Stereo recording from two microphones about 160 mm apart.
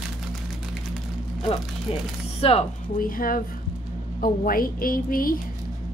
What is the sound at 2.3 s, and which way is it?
Speech, 35° left (ahead or behind).